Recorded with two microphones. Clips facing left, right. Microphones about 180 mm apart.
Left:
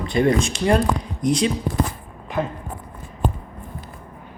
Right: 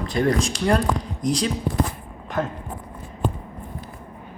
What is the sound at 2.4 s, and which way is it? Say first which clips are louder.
Speech: left 1 dB; centre (ahead or behind).